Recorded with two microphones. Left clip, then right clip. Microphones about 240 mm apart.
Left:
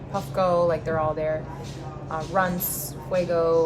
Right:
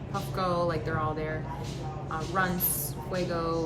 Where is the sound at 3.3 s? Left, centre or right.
Left.